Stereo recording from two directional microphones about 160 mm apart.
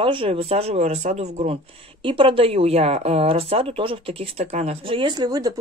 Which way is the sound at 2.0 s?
30° right (ahead or behind).